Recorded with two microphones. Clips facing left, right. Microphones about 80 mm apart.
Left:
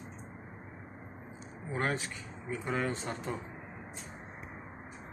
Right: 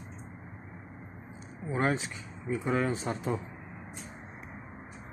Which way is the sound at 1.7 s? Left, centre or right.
Centre.